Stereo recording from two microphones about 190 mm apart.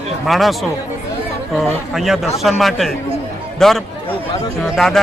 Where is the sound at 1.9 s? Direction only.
Centre (ahead or behind).